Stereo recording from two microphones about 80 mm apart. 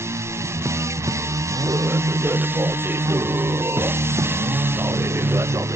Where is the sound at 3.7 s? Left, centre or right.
Right.